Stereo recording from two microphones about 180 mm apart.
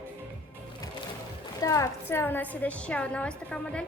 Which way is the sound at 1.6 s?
20° left (ahead or behind).